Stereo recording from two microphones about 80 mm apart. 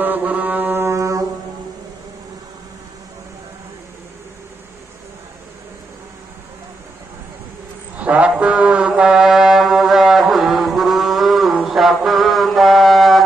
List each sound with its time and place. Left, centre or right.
0.0 s mantra: right
0.8 s music: right
7.9 s music: centre
11.6 s mantra: centre